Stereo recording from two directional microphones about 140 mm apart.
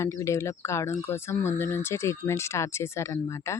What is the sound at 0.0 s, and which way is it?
Speech, 20° left (ahead or behind).